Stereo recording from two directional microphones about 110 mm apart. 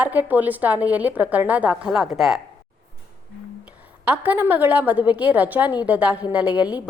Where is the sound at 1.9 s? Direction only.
Centre (ahead or behind).